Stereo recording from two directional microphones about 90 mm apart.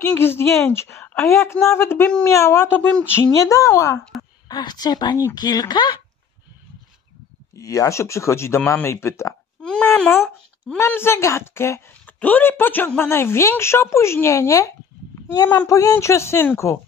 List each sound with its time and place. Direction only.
0.2 s a woman's voice: 25° left (ahead or behind)
4.5 s speech: 50° left (ahead or behind)
7.5 s a woman's voice: 35° left (ahead or behind)
9.6 s a sound: 10° left (ahead or behind)
9.9 s a woman's voice: 20° left (ahead or behind)